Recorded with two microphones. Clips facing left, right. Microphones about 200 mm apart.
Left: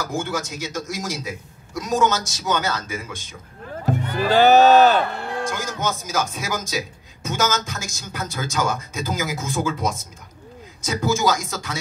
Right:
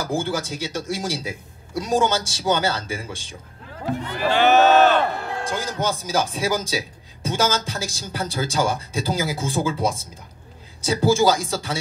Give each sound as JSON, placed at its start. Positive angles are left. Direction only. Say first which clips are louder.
{"t": 0.0, "sound": "a man's voice", "louder": "right 2 dB", "side_deg": -30}
{"t": 3.7, "sound": "speech", "louder": "left 3 dB", "side_deg": 45}
{"t": 5.4, "sound": "a man's voice", "louder": "even", "side_deg": -30}